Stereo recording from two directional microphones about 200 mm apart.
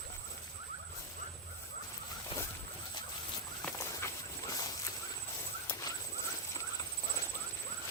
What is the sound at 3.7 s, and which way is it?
Clip-clop, 15° left (ahead or behind).